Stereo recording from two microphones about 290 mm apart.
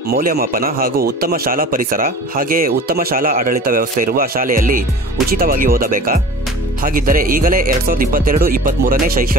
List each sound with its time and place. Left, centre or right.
0.1 s a man's voice: right